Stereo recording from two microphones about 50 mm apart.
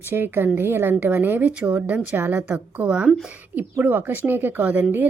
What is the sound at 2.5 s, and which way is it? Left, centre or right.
Speech, right.